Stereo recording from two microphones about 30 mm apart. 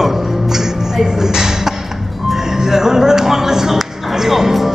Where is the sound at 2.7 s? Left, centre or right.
Centre.